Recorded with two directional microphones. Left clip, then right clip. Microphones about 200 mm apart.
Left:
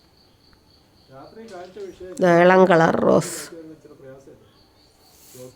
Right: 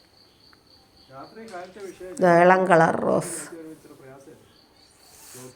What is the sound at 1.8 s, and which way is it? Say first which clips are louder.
Speech: left 3 dB; 40° right (ahead or behind).